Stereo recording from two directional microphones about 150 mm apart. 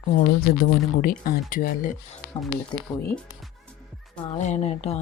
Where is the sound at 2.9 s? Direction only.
5° left (ahead or behind).